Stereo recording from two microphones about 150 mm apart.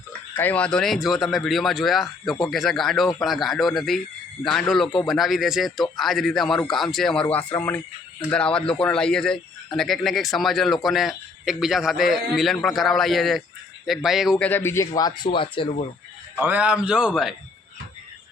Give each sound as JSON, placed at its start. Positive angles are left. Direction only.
{"t": 0.3, "sound": "a man's voice", "side_deg": 10}
{"t": 14.4, "sound": "a man's voice", "side_deg": 15}
{"t": 16.3, "sound": "a man's voice", "side_deg": -15}